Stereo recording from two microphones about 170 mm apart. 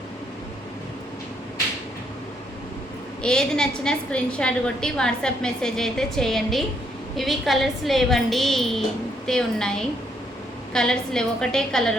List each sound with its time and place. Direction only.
3.2 s a woman's voice: 5° left (ahead or behind)